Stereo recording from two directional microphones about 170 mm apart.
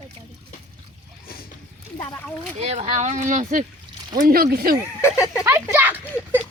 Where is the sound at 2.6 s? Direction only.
40° right (ahead or behind); by 4.7 s 60° right (ahead or behind).